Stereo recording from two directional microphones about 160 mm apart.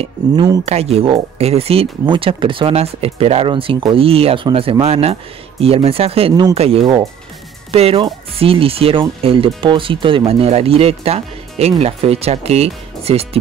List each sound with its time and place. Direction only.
0.7 s speech: 40° right (ahead or behind)